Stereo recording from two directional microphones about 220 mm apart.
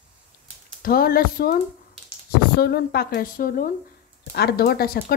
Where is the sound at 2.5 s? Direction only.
45° left (ahead or behind).